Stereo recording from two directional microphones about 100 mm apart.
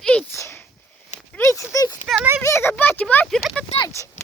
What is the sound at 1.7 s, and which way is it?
Clip-clop, 40° left (ahead or behind).